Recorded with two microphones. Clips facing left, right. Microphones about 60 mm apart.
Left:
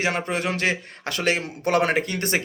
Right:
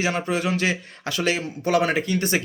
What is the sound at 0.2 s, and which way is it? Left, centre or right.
A man's voice, left.